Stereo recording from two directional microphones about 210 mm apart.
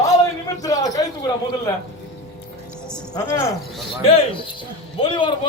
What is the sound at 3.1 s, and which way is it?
Speech, 20° left (ahead or behind).